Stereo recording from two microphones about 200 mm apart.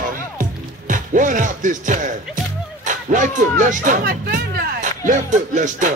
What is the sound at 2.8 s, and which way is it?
Speech, 40° right (ahead or behind).